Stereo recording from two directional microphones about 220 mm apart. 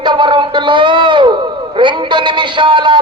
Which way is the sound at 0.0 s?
20° right (ahead or behind).